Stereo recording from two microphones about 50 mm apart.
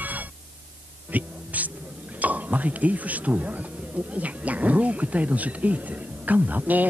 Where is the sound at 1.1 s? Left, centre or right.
Right.